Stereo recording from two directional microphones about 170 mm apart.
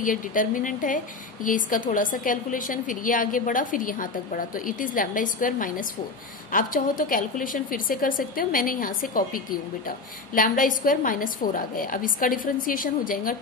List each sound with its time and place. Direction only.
0.0 s a woman's voice: 50° left (ahead or behind)